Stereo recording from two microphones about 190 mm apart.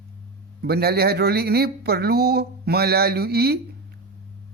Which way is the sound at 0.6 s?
55° right (ahead or behind).